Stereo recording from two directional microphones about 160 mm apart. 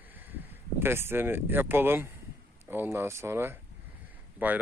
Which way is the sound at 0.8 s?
15° right (ahead or behind).